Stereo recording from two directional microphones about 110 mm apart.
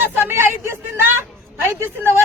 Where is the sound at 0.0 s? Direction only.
20° right (ahead or behind).